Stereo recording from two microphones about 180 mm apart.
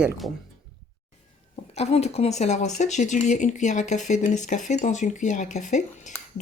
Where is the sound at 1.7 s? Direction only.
35° left (ahead or behind).